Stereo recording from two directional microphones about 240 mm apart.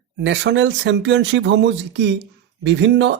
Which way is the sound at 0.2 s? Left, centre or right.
Right.